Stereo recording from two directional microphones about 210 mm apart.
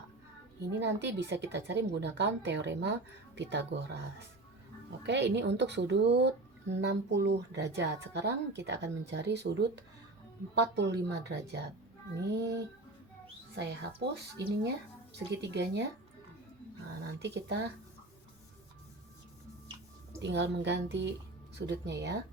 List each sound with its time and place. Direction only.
0.6 s speech: 55° right (ahead or behind)
5.0 s speech: 55° right (ahead or behind)
13.6 s speech: 55° right (ahead or behind)
17.2 s speech: 55° right (ahead or behind)
20.2 s speech: 55° right (ahead or behind)